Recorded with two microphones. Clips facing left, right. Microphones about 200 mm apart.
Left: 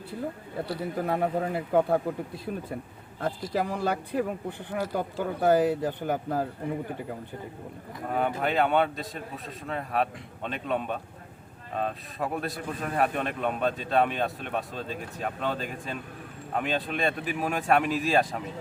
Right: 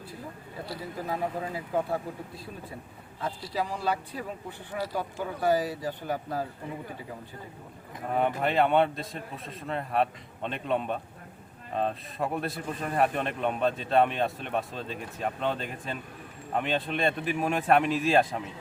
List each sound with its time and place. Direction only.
0.9 s speech: 60° left (ahead or behind)
8.1 s a man's voice: centre (ahead or behind)